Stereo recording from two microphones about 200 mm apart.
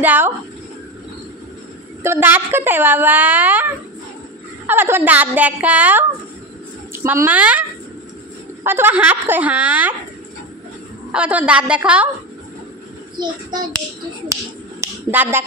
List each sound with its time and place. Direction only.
0.0 s a woman's voice: 10° right (ahead or behind)
2.0 s a woman's voice: 10° right (ahead or behind)
4.6 s a woman's voice: 10° right (ahead or behind)
8.6 s a woman's voice: 10° right (ahead or behind)
11.1 s a woman's voice: 5° right (ahead or behind)
13.2 s a child's voice: 20° right (ahead or behind)